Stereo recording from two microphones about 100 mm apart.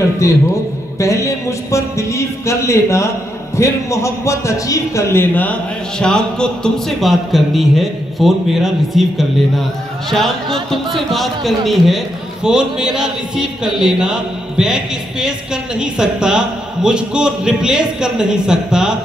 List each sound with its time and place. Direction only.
0.2 s a man's voice: 30° left (ahead or behind); by 9.0 s centre (ahead or behind)
10.0 s a man's voice: centre (ahead or behind)